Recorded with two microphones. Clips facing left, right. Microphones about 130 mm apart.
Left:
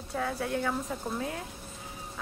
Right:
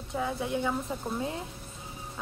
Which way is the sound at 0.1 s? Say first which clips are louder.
Right 1 dB; 20° right (ahead or behind).